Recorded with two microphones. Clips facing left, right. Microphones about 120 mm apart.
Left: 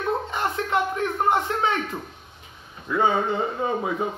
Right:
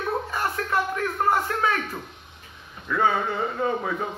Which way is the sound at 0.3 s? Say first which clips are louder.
Left 2 dB; 20° left (ahead or behind).